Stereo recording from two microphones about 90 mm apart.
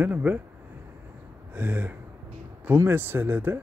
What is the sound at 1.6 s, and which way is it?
Speech, 20° right (ahead or behind).